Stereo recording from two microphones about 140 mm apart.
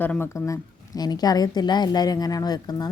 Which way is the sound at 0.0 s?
15° left (ahead or behind).